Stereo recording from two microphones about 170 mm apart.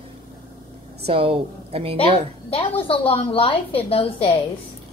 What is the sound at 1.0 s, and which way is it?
Speech, 30° right (ahead or behind).